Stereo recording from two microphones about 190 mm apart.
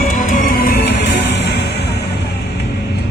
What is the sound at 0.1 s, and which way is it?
Music, 45° left (ahead or behind).